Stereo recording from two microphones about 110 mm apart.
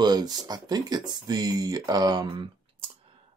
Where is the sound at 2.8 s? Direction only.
60° right (ahead or behind).